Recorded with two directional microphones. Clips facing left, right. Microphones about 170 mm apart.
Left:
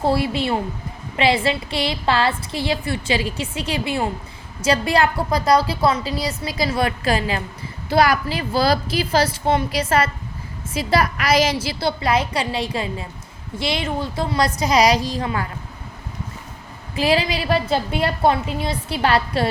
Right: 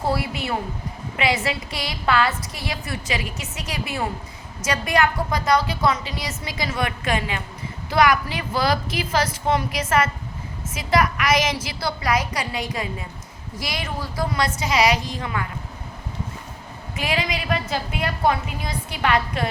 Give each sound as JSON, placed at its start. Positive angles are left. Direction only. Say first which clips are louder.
{"t": 0.0, "sound": "a woman's voice", "louder": "left 5 dB", "side_deg": 25}
{"t": 16.9, "sound": "a woman's voice", "louder": "left 6 dB", "side_deg": 30}